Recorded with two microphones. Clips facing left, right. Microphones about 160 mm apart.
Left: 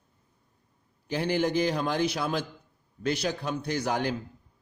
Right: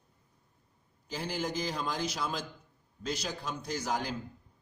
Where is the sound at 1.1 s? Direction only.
65° left (ahead or behind).